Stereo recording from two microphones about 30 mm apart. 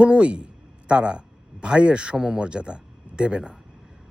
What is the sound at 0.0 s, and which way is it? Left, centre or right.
A man's voice, right.